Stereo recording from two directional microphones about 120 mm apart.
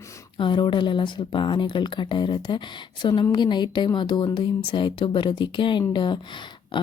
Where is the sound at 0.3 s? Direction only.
40° left (ahead or behind).